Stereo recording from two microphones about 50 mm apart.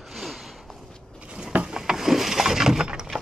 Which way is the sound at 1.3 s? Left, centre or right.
Right.